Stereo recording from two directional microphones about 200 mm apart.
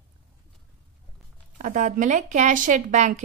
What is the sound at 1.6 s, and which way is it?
A woman's voice, 40° right (ahead or behind).